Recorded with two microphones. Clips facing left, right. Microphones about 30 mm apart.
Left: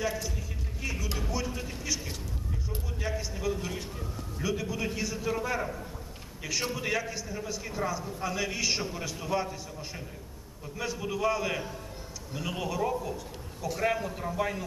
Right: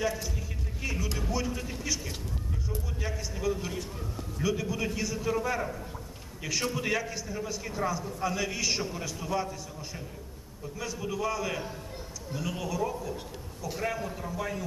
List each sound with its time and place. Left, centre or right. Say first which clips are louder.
0.0 s a man's voice: right 1 dB; centre
14.1 s a man's voice: left 3 dB; centre